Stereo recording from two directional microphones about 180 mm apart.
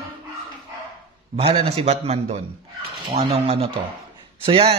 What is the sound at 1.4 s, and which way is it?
Speech, 35° right (ahead or behind).